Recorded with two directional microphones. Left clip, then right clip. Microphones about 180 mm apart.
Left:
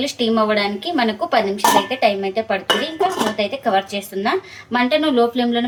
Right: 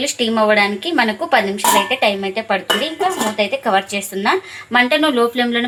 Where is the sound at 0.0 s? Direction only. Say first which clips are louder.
Right 2 dB; 25° right (ahead or behind).